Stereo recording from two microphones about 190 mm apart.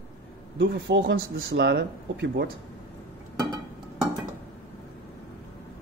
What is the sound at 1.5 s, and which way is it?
Speech, 60° right (ahead or behind).